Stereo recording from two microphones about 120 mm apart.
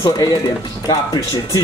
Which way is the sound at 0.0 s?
30° left (ahead or behind).